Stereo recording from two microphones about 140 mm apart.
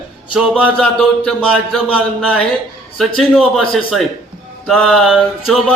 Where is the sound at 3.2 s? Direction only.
5° left (ahead or behind).